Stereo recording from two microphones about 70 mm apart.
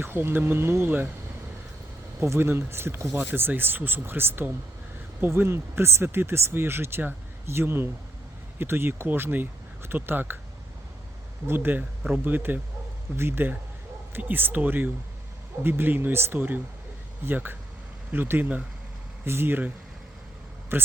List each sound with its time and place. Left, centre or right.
0.0 s speech: right
2.2 s speech: right
11.4 s speech: right
19.2 s speech: right